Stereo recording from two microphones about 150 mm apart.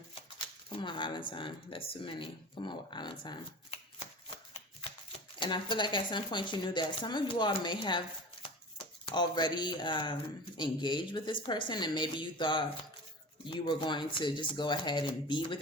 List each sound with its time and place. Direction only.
0.1 s speech: 35° left (ahead or behind)
5.4 s speech: 30° left (ahead or behind)